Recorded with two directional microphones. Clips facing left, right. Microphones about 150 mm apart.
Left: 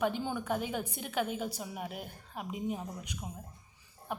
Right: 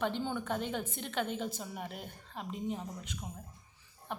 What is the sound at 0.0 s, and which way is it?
A woman's voice, 10° left (ahead or behind).